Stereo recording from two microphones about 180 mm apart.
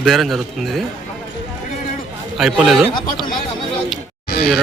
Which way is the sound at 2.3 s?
Centre (ahead or behind).